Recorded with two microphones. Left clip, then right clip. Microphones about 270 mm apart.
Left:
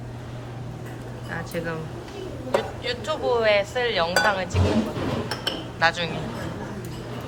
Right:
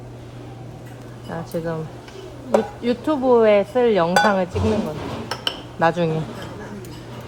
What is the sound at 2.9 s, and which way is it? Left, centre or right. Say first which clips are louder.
Cutlery: right 7 dB; right.